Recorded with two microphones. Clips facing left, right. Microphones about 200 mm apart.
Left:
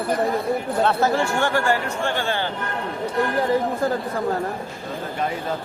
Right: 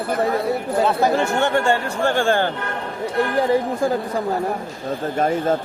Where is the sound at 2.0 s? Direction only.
45° right (ahead or behind).